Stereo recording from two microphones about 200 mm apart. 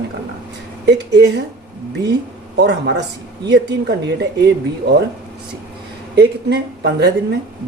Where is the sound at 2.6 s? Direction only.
55° right (ahead or behind).